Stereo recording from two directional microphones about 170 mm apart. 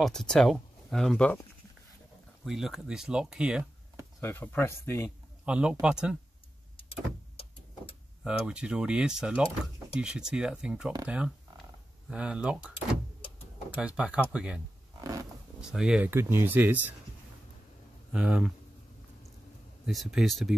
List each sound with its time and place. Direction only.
0.0 s speech: 5° left (ahead or behind)
2.4 s speech: centre (ahead or behind)
4.2 s speech: 10° left (ahead or behind)
5.4 s speech: 5° right (ahead or behind)
6.8 s vehicle: 35° left (ahead or behind)
8.2 s speech: 5° right (ahead or behind)
13.7 s speech: 5° right (ahead or behind)
15.0 s wild animals: 20° right (ahead or behind)
15.6 s speech: 5° right (ahead or behind)
18.1 s speech: 5° right (ahead or behind)
19.9 s speech: centre (ahead or behind)